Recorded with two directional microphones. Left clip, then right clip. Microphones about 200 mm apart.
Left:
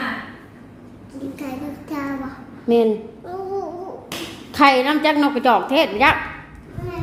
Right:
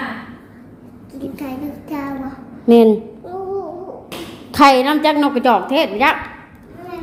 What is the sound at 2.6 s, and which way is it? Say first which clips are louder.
Speech: right 6 dB; 30° right (ahead or behind).